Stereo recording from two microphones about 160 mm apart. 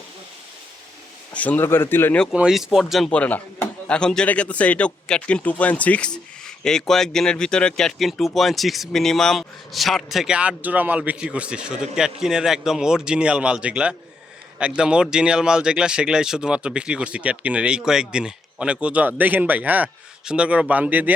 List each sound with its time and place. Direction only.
1.3 s speech: 10° left (ahead or behind)
2.3 s speech: 5° right (ahead or behind)